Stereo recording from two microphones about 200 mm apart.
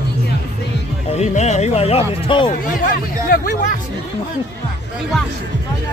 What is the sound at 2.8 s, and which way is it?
Speech, 45° left (ahead or behind).